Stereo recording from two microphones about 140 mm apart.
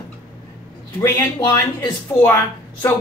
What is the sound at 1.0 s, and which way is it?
Speech, 15° left (ahead or behind).